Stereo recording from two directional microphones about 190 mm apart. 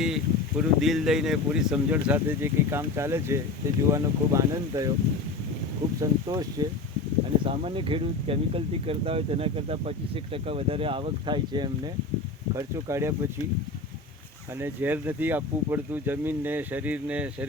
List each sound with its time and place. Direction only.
0.0 s speech: 5° right (ahead or behind)
6.0 s speech: 20° right (ahead or behind)
14.6 s speech: 10° right (ahead or behind)